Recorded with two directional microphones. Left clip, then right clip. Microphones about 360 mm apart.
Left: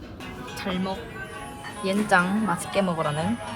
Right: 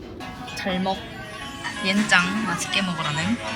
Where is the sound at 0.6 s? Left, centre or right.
Centre.